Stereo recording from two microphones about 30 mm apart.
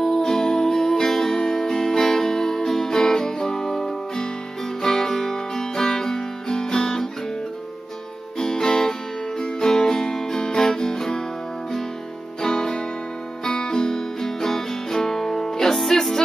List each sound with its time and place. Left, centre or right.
0.2 s music: centre
8.4 s music: left
12.4 s music: left